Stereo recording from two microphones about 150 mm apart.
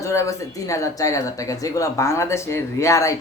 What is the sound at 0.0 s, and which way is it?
A man's voice, 20° left (ahead or behind).